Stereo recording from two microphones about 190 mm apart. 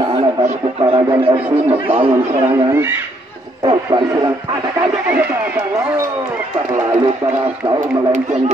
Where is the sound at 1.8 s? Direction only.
30° right (ahead or behind).